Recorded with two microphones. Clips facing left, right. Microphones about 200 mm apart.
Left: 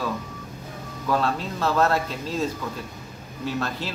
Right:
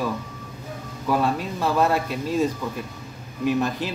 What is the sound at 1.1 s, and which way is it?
A man's voice, 15° right (ahead or behind).